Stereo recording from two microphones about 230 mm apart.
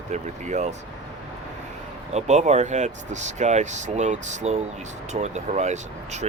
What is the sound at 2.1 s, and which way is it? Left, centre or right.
Speech, right.